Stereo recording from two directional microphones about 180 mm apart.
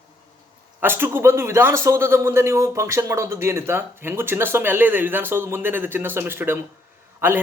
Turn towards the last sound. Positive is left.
turn(degrees=-10)  # may be behind; listen again after turning